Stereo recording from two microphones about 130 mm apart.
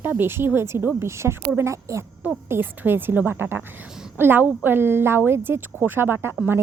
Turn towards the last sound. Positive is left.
turn(degrees=-10)  # may be behind; listen again after turning